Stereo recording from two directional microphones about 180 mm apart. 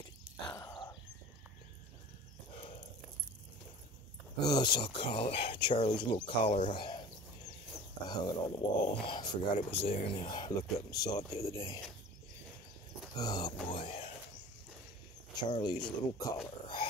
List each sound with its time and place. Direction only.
0.5 s a sound: 20° left (ahead or behind)
4.5 s speech: 25° left (ahead or behind)
6.7 s bird: 25° left (ahead or behind)
8.1 s speech: 25° left (ahead or behind)
13.1 s speech: 20° left (ahead or behind)
15.6 s speech: 25° left (ahead or behind)